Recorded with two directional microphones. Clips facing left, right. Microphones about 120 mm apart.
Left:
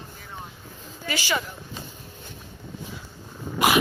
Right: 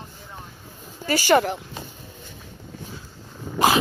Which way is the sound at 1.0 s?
45° right (ahead or behind).